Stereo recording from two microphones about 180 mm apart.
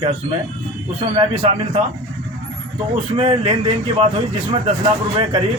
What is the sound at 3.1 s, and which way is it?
Speech, 30° right (ahead or behind).